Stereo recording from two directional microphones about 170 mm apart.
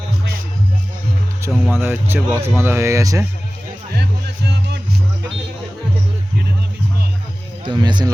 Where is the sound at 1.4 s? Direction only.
10° right (ahead or behind).